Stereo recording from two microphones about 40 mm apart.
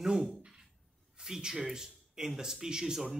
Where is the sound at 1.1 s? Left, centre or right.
Centre.